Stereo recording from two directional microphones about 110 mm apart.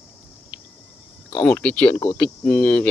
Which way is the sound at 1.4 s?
10° left (ahead or behind).